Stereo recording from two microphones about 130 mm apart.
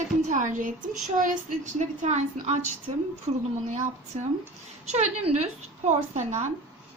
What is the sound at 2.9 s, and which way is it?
Speech, 45° right (ahead or behind).